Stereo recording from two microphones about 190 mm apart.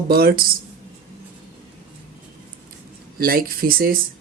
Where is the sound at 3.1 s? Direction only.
50° right (ahead or behind).